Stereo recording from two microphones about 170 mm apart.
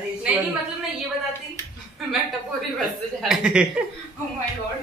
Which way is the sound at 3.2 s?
5° right (ahead or behind).